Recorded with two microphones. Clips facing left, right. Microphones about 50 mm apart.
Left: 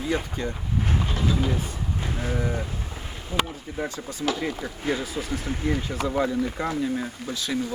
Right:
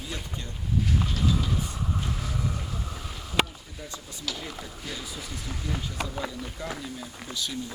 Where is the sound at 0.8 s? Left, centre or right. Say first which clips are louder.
Left 2 dB; left.